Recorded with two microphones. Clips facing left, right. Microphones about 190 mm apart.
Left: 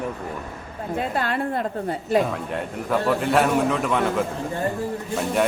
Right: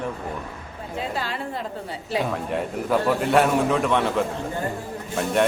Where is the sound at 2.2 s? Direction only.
Centre (ahead or behind).